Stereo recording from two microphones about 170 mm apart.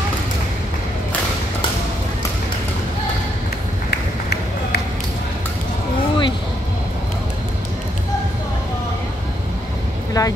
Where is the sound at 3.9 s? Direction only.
75° left (ahead or behind).